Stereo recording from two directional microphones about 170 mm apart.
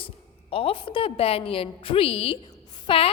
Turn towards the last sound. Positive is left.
turn(degrees=30)  # may be behind; listen again after turning